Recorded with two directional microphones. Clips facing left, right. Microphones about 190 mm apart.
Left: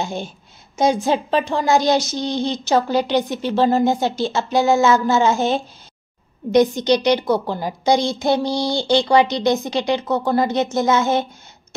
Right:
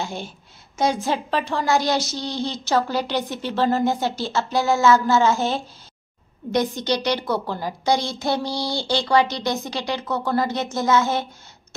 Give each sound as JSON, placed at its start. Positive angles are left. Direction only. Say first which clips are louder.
{"t": 0.0, "sound": "a woman's voice", "louder": "left 4 dB", "side_deg": 20}